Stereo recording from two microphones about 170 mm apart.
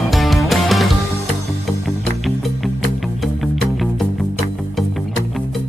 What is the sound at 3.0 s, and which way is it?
Music, centre (ahead or behind).